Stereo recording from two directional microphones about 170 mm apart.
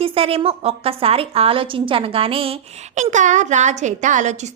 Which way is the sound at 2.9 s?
45° right (ahead or behind).